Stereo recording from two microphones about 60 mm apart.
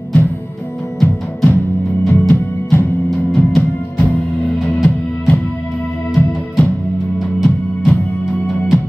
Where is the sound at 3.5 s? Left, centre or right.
Centre.